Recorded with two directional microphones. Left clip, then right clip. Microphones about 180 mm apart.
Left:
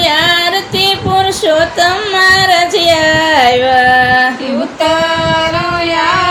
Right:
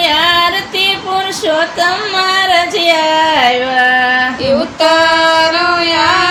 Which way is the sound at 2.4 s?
15° left (ahead or behind).